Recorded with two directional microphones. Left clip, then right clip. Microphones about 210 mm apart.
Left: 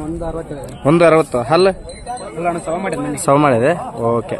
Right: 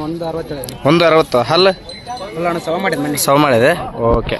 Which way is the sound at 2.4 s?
35° right (ahead or behind).